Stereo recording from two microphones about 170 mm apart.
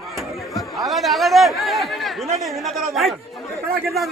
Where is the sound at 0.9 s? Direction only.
Centre (ahead or behind).